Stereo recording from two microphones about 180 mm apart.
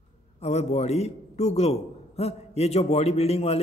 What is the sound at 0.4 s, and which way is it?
A man's voice, 35° left (ahead or behind).